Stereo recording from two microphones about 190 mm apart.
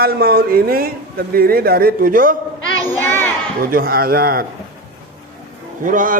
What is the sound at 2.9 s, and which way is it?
Speech, 10° left (ahead or behind).